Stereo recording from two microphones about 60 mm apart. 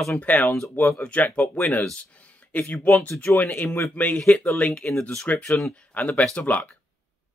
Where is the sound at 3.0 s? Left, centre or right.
Left.